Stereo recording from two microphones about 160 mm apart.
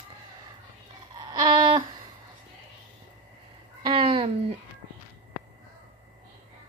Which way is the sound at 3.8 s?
35° right (ahead or behind).